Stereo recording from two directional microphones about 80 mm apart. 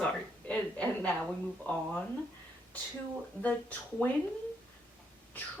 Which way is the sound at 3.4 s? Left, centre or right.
Left.